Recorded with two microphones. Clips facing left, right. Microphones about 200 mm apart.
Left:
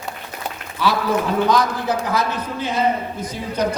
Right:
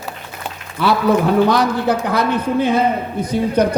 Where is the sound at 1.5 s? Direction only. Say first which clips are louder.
Right 3 dB; 65° right (ahead or behind).